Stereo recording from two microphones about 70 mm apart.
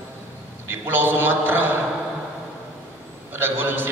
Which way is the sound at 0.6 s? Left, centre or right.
Right.